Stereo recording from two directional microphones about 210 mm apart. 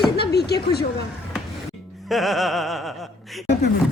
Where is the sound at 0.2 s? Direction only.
50° left (ahead or behind).